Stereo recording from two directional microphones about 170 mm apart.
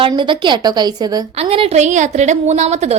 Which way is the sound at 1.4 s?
35° right (ahead or behind).